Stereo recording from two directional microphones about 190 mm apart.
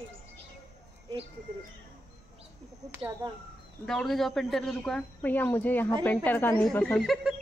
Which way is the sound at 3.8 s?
Centre (ahead or behind).